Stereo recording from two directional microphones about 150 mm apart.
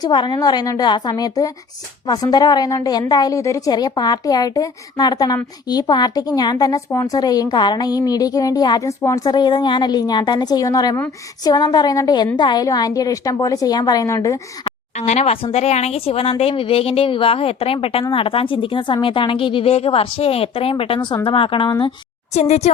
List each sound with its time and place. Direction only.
0.0 s a woman's voice: 30° left (ahead or behind)
14.9 s a woman's voice: 50° left (ahead or behind); by 21.9 s 30° left (ahead or behind)
22.4 s speech: 45° left (ahead or behind)